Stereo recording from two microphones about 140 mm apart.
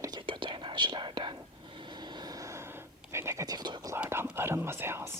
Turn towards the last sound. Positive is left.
turn(degrees=-15)  # may be behind; listen again after turning